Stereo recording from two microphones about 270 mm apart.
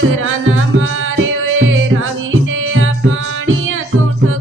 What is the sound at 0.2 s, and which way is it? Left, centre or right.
Music, right.